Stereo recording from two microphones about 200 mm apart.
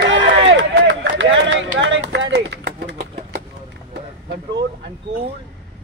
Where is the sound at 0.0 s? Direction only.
65° right (ahead or behind).